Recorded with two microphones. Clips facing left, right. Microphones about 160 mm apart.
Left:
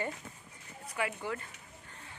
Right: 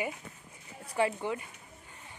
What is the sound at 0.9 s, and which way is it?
Speech, 30° right (ahead or behind).